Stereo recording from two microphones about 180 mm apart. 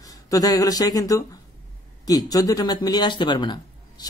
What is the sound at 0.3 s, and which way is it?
Speech, 20° left (ahead or behind).